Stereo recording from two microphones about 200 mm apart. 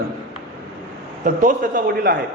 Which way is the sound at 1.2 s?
40° right (ahead or behind).